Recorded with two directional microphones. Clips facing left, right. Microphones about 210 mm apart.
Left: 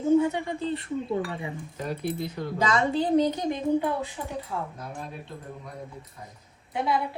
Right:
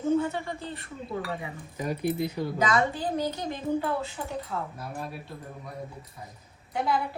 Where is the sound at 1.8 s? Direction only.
5° right (ahead or behind).